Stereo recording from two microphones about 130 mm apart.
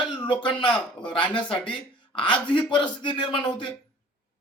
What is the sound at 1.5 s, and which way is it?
A man's voice, 40° left (ahead or behind).